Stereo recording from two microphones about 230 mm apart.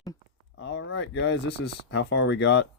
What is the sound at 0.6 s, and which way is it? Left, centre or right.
Speech, left.